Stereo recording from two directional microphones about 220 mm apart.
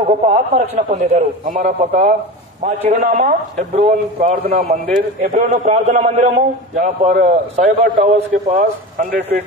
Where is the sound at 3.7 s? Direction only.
30° right (ahead or behind).